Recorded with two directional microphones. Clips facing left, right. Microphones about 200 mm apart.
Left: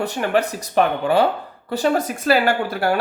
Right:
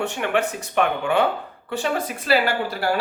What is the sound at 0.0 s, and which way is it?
A man's voice, 35° left (ahead or behind).